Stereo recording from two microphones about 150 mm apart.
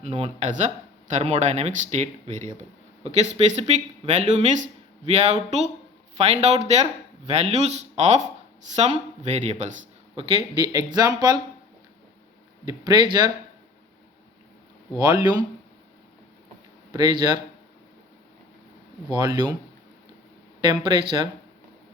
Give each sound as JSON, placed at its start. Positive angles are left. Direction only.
{"t": 0.0, "sound": "speech", "side_deg": -45}
{"t": 10.2, "sound": "speech", "side_deg": -30}
{"t": 12.6, "sound": "speech", "side_deg": -30}
{"t": 14.9, "sound": "speech", "side_deg": -25}
{"t": 16.9, "sound": "speech", "side_deg": -30}
{"t": 19.1, "sound": "speech", "side_deg": -30}
{"t": 20.6, "sound": "speech", "side_deg": -35}